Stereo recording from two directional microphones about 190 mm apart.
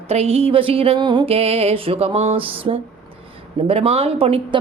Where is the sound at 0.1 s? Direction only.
30° right (ahead or behind).